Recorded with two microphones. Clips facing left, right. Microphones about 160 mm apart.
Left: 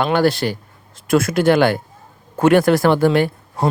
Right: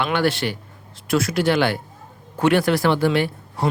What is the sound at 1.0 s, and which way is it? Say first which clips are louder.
Speech: left 5 dB; 50° left (ahead or behind).